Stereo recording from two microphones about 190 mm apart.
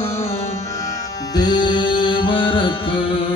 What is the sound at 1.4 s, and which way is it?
Music, 20° left (ahead or behind).